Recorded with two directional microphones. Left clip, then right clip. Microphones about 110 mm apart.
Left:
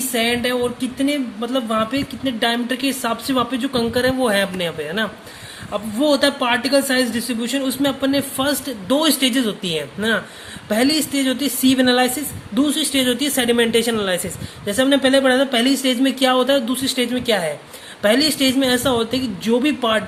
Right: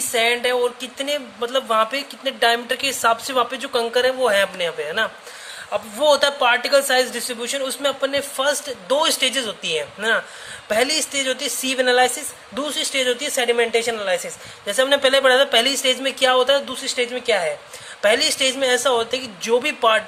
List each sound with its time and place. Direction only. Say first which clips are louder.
0.1 s speech: right 1 dB; 35° right (ahead or behind); by 5.0 s 20° right (ahead or behind)
5.7 s a man's voice: right 1 dB; 35° right (ahead or behind); by 13.1 s 15° right (ahead or behind)
13.1 s speech: left 1 dB; centre (ahead or behind)
14.7 s a man's voice: left 1 dB; 35° right (ahead or behind)